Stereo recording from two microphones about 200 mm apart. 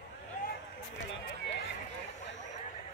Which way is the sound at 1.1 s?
65° left (ahead or behind).